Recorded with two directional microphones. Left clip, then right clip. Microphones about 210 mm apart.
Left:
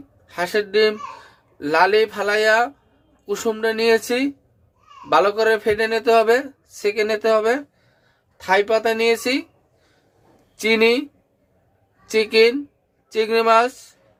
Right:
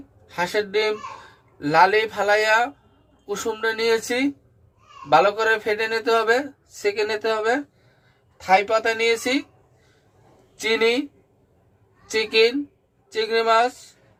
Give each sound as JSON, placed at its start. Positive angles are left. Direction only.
{"t": 0.3, "sound": "speech", "side_deg": 25}
{"t": 8.8, "sound": "speech", "side_deg": 30}
{"t": 10.6, "sound": "speech", "side_deg": 30}
{"t": 12.1, "sound": "speech", "side_deg": 30}